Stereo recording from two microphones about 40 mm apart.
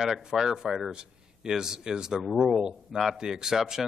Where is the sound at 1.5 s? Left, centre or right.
Centre.